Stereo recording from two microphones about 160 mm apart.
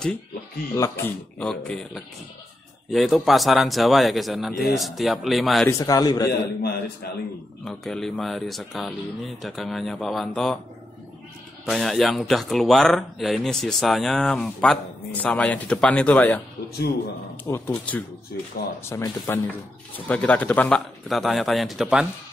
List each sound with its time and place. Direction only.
0.7 s a man's voice: 20° left (ahead or behind)
1.4 s speech: 5° left (ahead or behind)
5.7 s a man's voice: 20° left (ahead or behind)
6.2 s a man's voice: 75° left (ahead or behind)
7.6 s speech: centre (ahead or behind)
11.6 s speech: centre (ahead or behind)
17.5 s speech: 10° left (ahead or behind)